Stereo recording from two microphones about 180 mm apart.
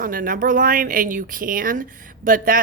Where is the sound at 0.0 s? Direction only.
50° right (ahead or behind).